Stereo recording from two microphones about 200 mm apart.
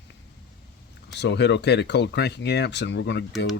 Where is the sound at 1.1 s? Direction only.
60° left (ahead or behind).